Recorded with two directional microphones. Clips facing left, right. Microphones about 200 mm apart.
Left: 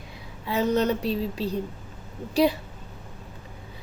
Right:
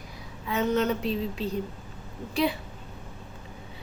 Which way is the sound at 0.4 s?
35° left (ahead or behind).